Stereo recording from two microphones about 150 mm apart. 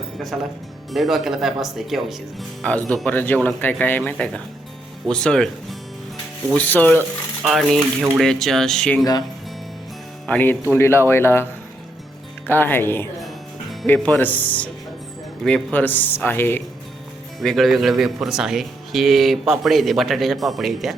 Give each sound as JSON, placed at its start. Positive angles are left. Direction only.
{"t": 0.9, "sound": "speech", "side_deg": 0}
{"t": 6.5, "sound": "speech", "side_deg": 10}
{"t": 7.4, "sound": "speech", "side_deg": 0}
{"t": 10.2, "sound": "speech", "side_deg": 10}
{"t": 12.5, "sound": "speech", "side_deg": 15}
{"t": 13.1, "sound": "music", "side_deg": 0}
{"t": 13.8, "sound": "speech", "side_deg": 10}
{"t": 17.4, "sound": "speech", "side_deg": 0}